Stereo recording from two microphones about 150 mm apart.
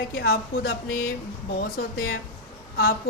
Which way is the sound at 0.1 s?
90° left.